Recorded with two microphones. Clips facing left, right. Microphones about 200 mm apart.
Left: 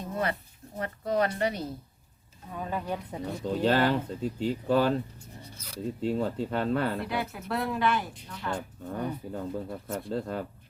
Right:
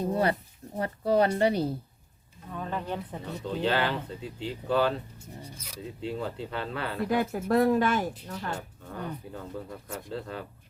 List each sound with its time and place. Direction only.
0.0 s speech: 35° right (ahead or behind)
2.5 s speech: 10° left (ahead or behind)
3.4 s speech: 40° left (ahead or behind)
6.0 s speech: 45° left (ahead or behind)
7.1 s speech: 45° right (ahead or behind)
9.3 s speech: 40° left (ahead or behind)